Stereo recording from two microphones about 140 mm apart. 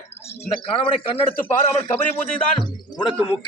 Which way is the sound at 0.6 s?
40° left (ahead or behind).